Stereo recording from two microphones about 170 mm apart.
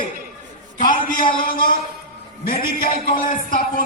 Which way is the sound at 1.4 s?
55° left (ahead or behind).